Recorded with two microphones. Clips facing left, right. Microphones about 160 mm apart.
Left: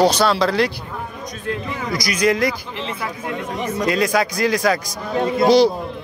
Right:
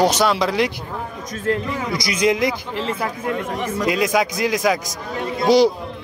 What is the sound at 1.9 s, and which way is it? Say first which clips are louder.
Speech: left 1 dB; 25° right (ahead or behind).